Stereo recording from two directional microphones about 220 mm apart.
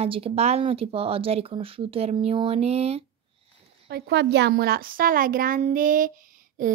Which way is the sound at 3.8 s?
50° right (ahead or behind).